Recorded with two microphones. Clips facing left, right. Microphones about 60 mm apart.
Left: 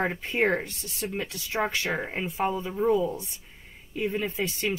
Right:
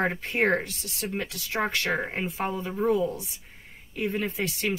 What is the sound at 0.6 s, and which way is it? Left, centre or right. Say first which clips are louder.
Speech: right 1 dB; right.